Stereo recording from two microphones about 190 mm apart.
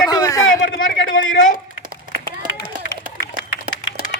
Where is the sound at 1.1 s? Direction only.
90° left.